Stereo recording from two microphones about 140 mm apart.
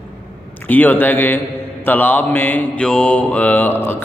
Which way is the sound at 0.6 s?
10° left (ahead or behind).